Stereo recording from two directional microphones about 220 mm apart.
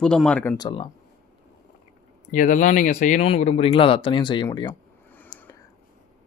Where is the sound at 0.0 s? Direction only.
5° left (ahead or behind).